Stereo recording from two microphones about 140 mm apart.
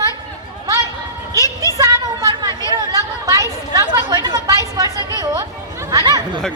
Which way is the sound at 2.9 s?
25° right (ahead or behind).